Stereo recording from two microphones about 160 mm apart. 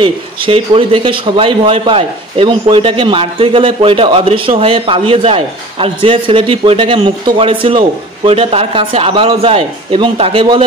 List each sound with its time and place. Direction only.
0.0 s a man's voice: 35° right (ahead or behind)